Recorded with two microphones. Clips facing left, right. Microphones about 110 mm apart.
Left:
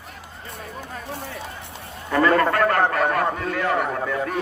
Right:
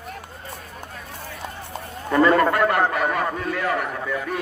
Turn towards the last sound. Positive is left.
turn(degrees=0)  # may be behind; listen again after turning